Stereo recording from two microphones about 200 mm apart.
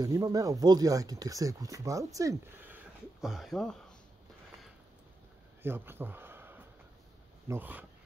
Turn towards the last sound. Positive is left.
turn(degrees=-10)  # may be behind; listen again after turning